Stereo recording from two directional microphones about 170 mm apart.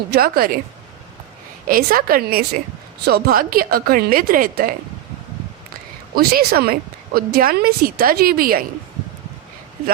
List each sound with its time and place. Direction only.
0.1 s a woman's voice: 60° right (ahead or behind)
1.6 s a woman's voice: 55° right (ahead or behind)
6.1 s a woman's voice: 65° right (ahead or behind)